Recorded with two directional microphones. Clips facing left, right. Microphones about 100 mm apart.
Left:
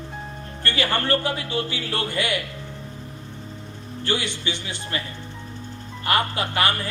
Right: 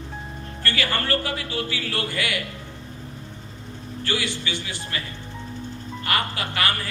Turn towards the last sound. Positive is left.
turn(degrees=25)  # may be behind; listen again after turning